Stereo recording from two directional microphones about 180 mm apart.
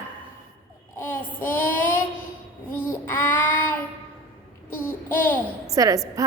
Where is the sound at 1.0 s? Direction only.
10° left (ahead or behind).